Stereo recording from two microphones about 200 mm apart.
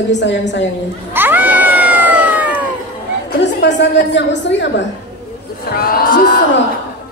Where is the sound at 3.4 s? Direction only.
60° left (ahead or behind).